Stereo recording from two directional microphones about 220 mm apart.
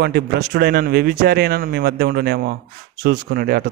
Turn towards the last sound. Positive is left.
turn(degrees=-45)  # may be behind; listen again after turning